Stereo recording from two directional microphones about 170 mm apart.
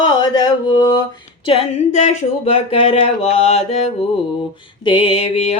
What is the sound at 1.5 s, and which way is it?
Mantra, 45° left (ahead or behind).